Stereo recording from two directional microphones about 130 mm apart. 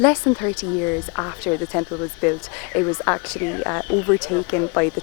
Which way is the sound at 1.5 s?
10° left (ahead or behind).